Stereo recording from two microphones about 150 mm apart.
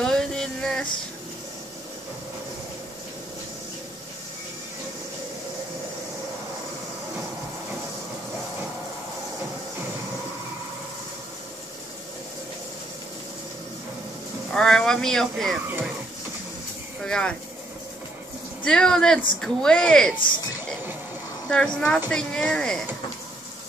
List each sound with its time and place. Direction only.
0.0 s a sound: 5° left (ahead or behind)
14.5 s speech: 5° left (ahead or behind)
17.0 s speech: 5° left (ahead or behind)
18.6 s a woman's voice: 5° left (ahead or behind)
21.5 s a woman's voice: 5° left (ahead or behind)